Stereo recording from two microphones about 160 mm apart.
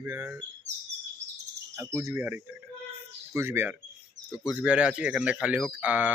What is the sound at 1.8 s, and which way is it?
Speech, 15° right (ahead or behind).